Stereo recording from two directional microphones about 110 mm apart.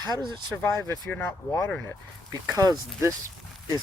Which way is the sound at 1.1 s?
20° left (ahead or behind).